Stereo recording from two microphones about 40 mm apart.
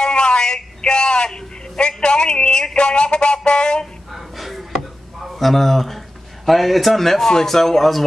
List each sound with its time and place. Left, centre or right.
0.0 s a man's voice: left
4.1 s a sound: centre
6.4 s a man's voice: centre